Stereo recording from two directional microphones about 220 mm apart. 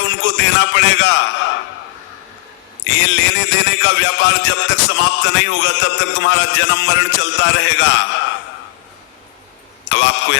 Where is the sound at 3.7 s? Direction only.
55° left (ahead or behind).